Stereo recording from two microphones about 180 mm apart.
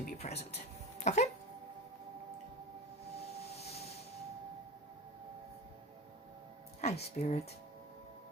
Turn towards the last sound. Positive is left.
turn(degrees=35)  # may be behind; listen again after turning